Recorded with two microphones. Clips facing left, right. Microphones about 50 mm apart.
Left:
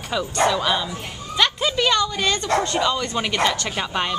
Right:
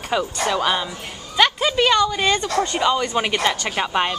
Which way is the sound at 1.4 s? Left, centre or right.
Centre.